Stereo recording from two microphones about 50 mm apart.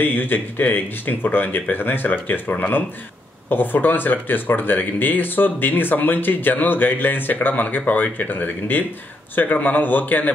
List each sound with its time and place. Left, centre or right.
0.0 s speech: left